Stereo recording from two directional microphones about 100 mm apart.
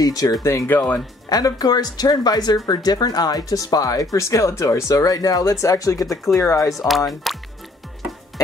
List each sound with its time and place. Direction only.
0.0 s a woman's voice: 40° left (ahead or behind)
1.3 s a woman's voice: 40° left (ahead or behind)
7.3 s speech: centre (ahead or behind)